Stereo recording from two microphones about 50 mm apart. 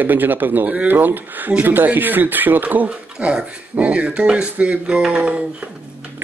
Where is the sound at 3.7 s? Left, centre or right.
Right.